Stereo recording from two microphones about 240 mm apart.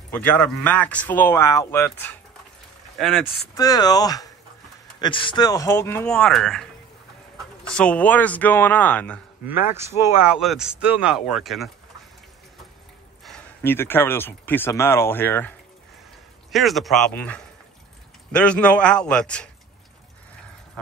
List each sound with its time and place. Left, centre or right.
0.1 s speech: centre
3.5 s speech: centre
9.5 s speech: centre
13.2 s speech: centre
16.5 s speech: centre